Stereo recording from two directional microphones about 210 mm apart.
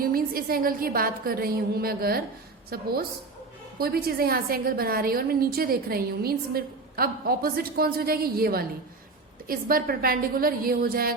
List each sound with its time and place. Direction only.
0.0 s a woman's voice: 45° right (ahead or behind)